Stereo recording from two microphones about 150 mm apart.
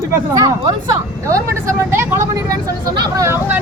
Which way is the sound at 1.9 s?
15° right (ahead or behind).